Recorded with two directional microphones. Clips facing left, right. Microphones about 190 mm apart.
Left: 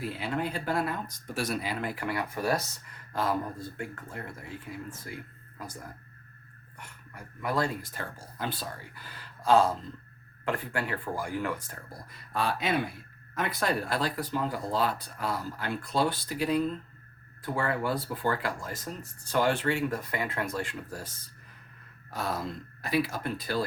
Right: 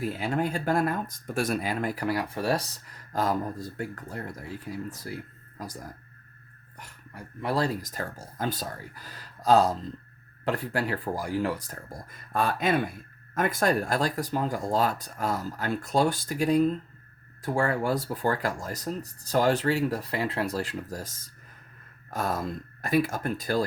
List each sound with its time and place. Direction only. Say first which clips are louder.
0.0 s speech: right 4 dB; 45° right (ahead or behind)
6.7 s speech: right 3 dB; 35° right (ahead or behind)